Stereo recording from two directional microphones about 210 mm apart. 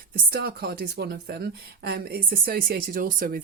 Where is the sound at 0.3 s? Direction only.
50° right (ahead or behind).